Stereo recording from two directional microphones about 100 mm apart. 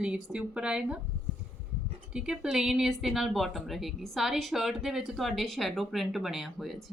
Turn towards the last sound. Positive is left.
turn(degrees=0)  # may be behind; listen again after turning